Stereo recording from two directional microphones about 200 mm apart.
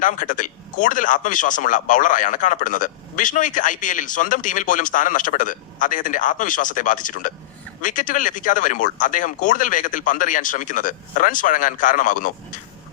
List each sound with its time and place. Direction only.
0.0 s speech: 40° left (ahead or behind)